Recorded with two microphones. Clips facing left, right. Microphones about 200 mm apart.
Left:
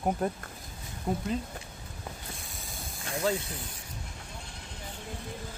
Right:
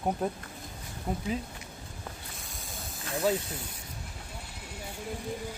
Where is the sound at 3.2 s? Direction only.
10° right (ahead or behind).